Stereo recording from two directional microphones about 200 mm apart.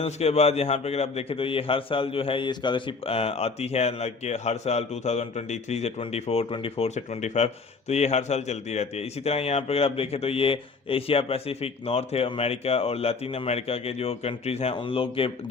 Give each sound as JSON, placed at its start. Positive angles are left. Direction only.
{"t": 0.0, "sound": "a man's voice", "side_deg": 30}